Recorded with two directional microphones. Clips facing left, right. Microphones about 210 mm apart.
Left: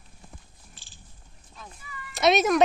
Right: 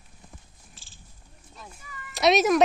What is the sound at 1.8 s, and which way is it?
Cat, 45° right (ahead or behind).